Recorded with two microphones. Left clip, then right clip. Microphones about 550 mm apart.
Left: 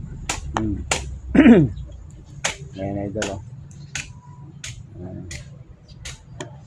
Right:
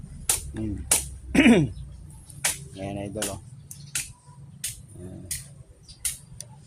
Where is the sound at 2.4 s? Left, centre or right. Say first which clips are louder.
Left 4 dB; centre.